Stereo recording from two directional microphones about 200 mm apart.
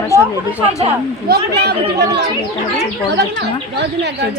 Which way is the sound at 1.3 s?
55° right (ahead or behind).